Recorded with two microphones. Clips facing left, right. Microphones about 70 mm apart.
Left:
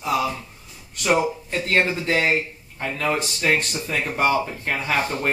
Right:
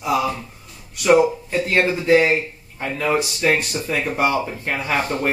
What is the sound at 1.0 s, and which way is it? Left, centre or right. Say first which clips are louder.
Speech: right 6 dB; centre.